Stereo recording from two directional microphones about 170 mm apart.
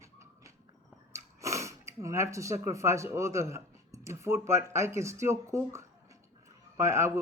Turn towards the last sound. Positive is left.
turn(degrees=-15)  # may be behind; listen again after turning